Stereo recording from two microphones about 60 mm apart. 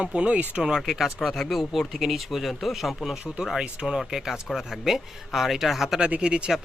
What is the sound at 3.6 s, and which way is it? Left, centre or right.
Speech, centre.